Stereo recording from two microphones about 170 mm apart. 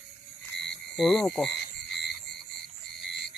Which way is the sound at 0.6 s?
Centre (ahead or behind).